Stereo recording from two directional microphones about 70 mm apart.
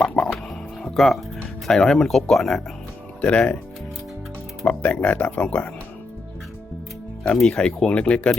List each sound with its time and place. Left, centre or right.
0.2 s music: left
0.8 s music: centre
1.6 s speech: centre
3.2 s speech: centre
4.6 s speech: centre
7.5 s speech: centre